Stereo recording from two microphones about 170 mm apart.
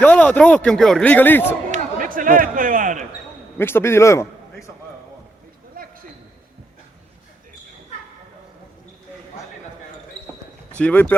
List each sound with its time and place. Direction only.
0.0 s a man's voice: 10° left (ahead or behind)
1.7 s basketball bounce: 55° right (ahead or behind)
3.6 s a man's voice: 15° left (ahead or behind)
5.8 s a sound: 55° right (ahead or behind)
10.8 s a man's voice: 5° left (ahead or behind)